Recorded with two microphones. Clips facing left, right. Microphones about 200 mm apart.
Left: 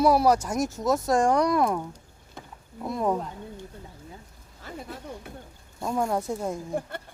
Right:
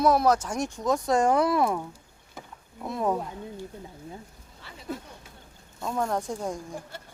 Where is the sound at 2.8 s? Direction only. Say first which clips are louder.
Left 1 dB; centre (ahead or behind).